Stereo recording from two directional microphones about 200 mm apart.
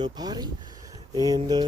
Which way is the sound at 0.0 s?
20° right (ahead or behind).